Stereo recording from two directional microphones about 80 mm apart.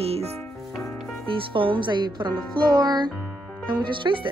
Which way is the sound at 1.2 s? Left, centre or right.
Right.